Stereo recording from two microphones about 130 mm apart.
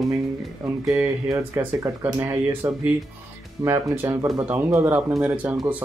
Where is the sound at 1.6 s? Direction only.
15° right (ahead or behind).